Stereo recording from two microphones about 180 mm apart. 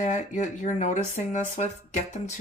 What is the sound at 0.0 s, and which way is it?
Speech, 45° left (ahead or behind).